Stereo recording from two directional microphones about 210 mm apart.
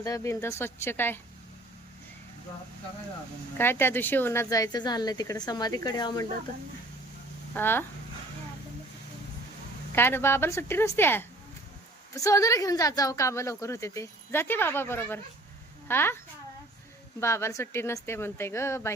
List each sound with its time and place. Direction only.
0.0 s speech: 15° left (ahead or behind)
3.6 s speech: 10° left (ahead or behind)
7.5 s speech: 10° left (ahead or behind)
9.9 s speech: 10° left (ahead or behind)